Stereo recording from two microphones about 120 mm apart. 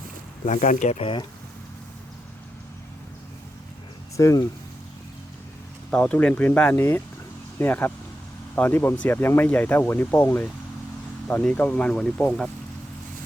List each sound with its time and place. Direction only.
0.4 s speech: 90° left
0.9 s speech: 50° left (ahead or behind)
4.2 s speech: 25° left (ahead or behind)
5.9 s speech: 10° left (ahead or behind)